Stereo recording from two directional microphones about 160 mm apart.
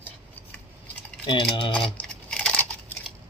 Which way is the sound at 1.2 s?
30° left (ahead or behind).